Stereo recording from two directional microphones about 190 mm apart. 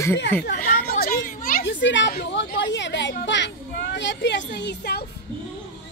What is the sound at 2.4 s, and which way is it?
A woman's voice, 70° left (ahead or behind).